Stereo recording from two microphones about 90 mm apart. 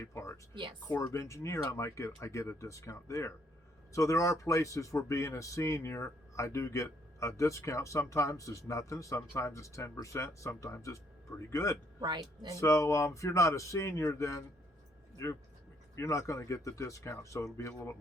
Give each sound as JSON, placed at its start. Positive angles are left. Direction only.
{"t": 0.0, "sound": "speech", "side_deg": 30}
{"t": 0.5, "sound": "speech", "side_deg": -65}
{"t": 0.9, "sound": "speech", "side_deg": 30}
{"t": 11.9, "sound": "speech", "side_deg": -55}
{"t": 12.5, "sound": "speech", "side_deg": 35}
{"t": 16.0, "sound": "speech", "side_deg": 35}